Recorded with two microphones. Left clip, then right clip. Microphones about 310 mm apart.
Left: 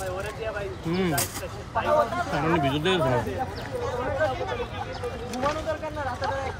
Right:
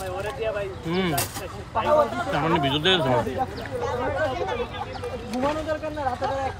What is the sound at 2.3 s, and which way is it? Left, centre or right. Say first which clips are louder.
Speech: right 2 dB; centre.